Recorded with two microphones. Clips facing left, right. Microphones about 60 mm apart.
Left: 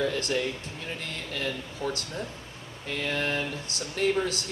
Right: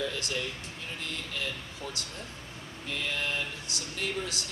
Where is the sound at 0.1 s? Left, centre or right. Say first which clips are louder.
Left 6 dB; left.